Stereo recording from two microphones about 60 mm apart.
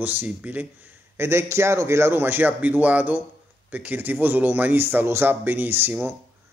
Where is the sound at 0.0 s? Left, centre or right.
Right.